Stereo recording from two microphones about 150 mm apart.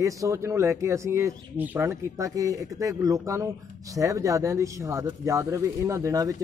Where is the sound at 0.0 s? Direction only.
20° right (ahead or behind).